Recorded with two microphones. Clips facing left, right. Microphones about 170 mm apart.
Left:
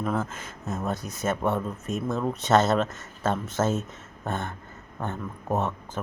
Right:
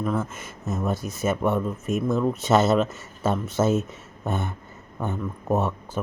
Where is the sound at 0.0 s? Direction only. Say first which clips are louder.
Right 2 dB; centre (ahead or behind).